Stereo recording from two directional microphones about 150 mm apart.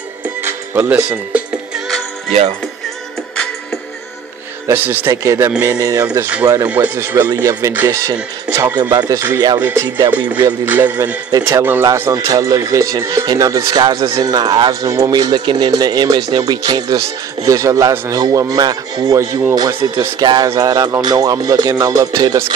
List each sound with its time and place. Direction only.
0.4 s speech: 15° right (ahead or behind)
4.6 s speech: 15° right (ahead or behind)
6.7 s speech: 10° right (ahead or behind)
9.8 s music: 30° right (ahead or behind)
10.6 s speech: 10° right (ahead or behind)
11.3 s speech: 25° right (ahead or behind)